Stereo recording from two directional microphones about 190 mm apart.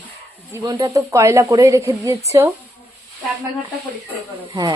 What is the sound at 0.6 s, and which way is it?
Speech, 25° right (ahead or behind).